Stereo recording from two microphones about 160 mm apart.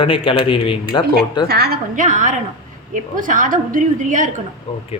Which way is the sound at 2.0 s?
50° right (ahead or behind).